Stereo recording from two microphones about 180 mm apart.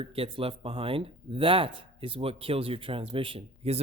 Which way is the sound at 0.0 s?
30° right (ahead or behind).